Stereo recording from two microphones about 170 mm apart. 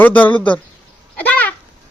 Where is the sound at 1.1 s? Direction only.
10° left (ahead or behind).